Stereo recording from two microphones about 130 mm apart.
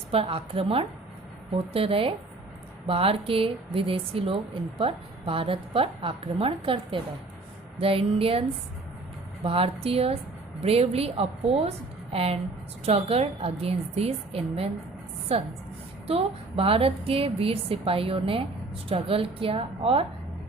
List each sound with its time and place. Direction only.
0.1 s a woman's voice: 45° right (ahead or behind)